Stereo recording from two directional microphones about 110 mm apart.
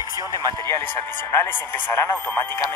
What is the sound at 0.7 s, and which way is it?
Speech, 20° left (ahead or behind).